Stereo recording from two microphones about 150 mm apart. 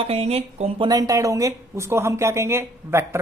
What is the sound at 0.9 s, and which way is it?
Speech, 25° right (ahead or behind).